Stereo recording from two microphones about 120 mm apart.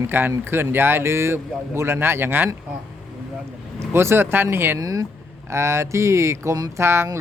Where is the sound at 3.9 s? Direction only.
20° right (ahead or behind).